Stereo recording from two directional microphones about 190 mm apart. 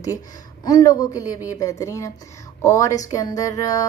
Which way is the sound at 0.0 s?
20° left (ahead or behind).